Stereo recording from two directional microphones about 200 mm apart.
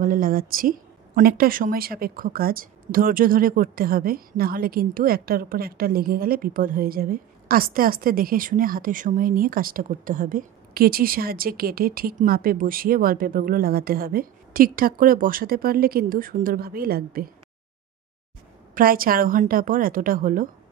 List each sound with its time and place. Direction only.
0.0 s a woman's voice: 45° right (ahead or behind)
18.8 s a woman's voice: 45° right (ahead or behind)